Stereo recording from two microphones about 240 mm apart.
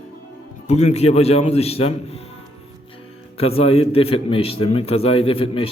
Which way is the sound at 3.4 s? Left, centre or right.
Left.